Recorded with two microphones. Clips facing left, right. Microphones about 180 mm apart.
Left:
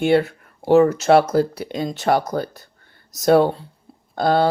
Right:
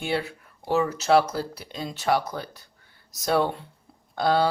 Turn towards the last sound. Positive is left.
turn(degrees=45)  # may be behind; listen again after turning